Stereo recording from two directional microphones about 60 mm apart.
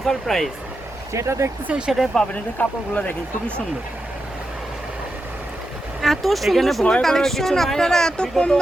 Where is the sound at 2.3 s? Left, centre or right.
Left.